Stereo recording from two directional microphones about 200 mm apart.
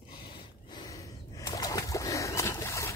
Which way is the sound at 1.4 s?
15° left (ahead or behind).